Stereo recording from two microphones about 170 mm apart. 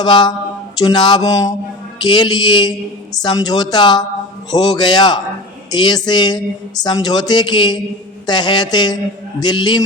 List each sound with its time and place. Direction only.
0.0 s a woman's voice: 25° left (ahead or behind)